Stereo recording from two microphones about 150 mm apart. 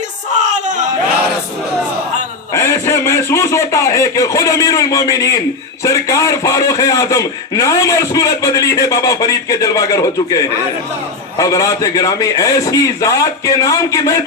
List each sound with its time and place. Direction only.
2.5 s a man's voice: 20° left (ahead or behind)
11.3 s a man's voice: 25° left (ahead or behind)